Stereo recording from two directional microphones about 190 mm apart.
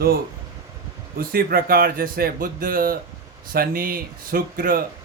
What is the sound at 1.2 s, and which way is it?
Speech, 50° right (ahead or behind).